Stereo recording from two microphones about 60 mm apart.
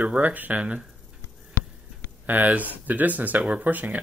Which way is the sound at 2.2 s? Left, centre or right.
Right.